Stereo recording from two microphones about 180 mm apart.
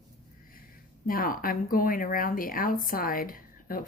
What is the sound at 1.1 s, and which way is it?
Speech, 50° left (ahead or behind).